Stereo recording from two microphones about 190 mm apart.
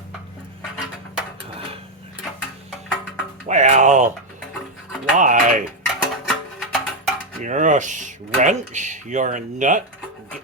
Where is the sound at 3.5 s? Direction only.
40° right (ahead or behind).